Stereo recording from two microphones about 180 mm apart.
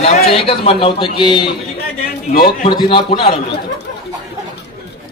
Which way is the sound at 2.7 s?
25° left (ahead or behind).